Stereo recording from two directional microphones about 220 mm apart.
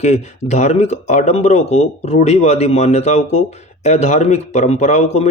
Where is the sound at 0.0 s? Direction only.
30° left (ahead or behind).